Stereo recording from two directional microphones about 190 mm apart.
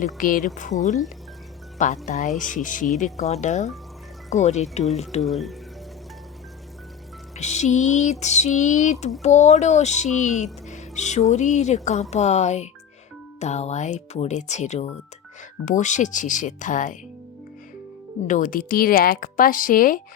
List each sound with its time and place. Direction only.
0.0 s speech: 45° left (ahead or behind)
1.8 s speech: 40° left (ahead or behind)
5.2 s speech: centre (ahead or behind)
7.3 s speech: 35° left (ahead or behind)
18.3 s speech: 45° left (ahead or behind)